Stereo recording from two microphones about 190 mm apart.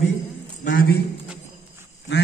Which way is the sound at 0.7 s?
55° left (ahead or behind).